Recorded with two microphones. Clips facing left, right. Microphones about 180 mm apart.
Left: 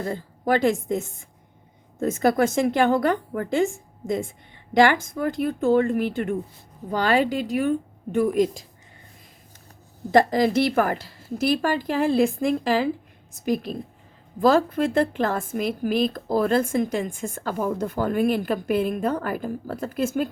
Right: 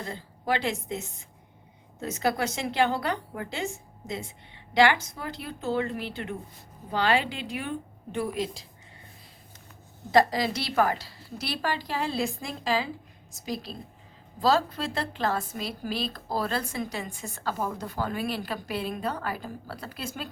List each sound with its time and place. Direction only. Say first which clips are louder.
0.0 s a woman's voice: left 8 dB; 45° left (ahead or behind)
10.1 s a woman's voice: left 5 dB; 50° left (ahead or behind)